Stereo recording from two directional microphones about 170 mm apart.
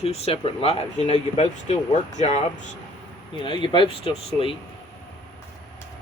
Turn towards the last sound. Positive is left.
turn(degrees=30)  # may be behind; listen again after turning